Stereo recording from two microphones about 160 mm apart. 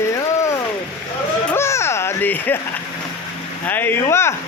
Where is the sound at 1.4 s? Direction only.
15° left (ahead or behind).